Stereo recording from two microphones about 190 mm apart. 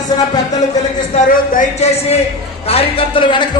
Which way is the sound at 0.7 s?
45° left (ahead or behind).